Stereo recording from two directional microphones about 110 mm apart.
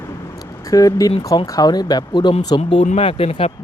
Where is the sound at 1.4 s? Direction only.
35° left (ahead or behind).